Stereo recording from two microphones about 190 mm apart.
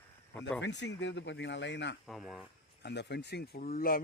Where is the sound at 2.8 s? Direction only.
60° left (ahead or behind).